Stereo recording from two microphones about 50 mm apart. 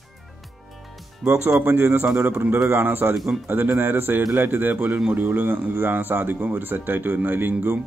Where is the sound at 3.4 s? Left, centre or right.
Right.